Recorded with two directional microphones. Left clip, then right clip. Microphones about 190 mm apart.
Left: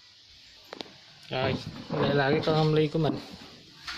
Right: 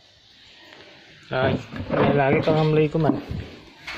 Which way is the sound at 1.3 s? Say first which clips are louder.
Right 7 dB; 20° left (ahead or behind).